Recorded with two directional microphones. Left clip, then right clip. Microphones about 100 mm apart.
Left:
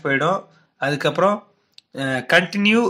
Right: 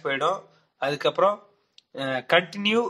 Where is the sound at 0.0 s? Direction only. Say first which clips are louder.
Left 5 dB; 20° left (ahead or behind).